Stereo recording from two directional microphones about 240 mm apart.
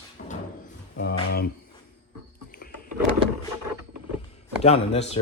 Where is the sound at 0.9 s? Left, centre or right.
Left.